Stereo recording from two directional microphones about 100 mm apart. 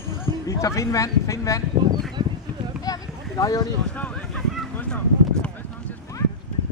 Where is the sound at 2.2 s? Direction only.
45° right (ahead or behind).